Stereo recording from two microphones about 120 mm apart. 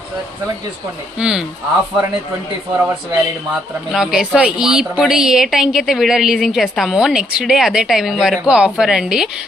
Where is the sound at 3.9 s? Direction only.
5° right (ahead or behind).